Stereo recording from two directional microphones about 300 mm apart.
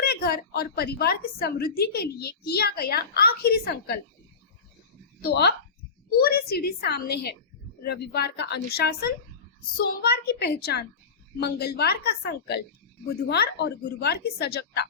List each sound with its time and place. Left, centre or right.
0.0 s a woman's voice: left
5.2 s a woman's voice: left